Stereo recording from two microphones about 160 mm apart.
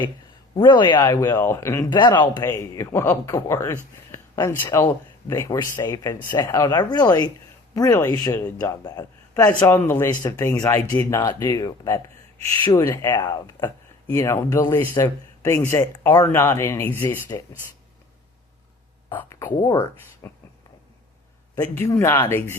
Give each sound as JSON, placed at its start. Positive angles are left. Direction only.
{"t": 0.5, "sound": "speech", "side_deg": 30}
{"t": 1.0, "sound": "speech", "side_deg": 10}
{"t": 2.5, "sound": "speech", "side_deg": 20}
{"t": 19.1, "sound": "speech", "side_deg": 15}
{"t": 21.5, "sound": "speech", "side_deg": 20}